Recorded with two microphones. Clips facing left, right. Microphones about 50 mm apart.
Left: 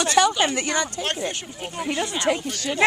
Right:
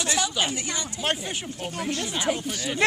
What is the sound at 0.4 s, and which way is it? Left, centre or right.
Speech, left.